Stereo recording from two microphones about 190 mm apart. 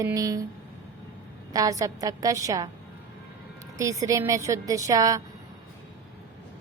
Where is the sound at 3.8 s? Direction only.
15° right (ahead or behind).